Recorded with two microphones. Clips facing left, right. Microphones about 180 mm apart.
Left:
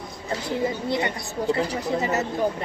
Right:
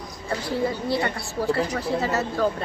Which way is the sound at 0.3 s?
20° left (ahead or behind).